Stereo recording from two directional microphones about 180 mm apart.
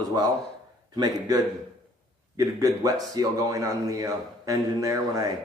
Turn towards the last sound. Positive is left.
turn(degrees=-20)  # may be behind; listen again after turning